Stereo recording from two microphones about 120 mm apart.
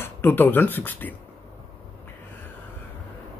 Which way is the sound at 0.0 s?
20° left (ahead or behind).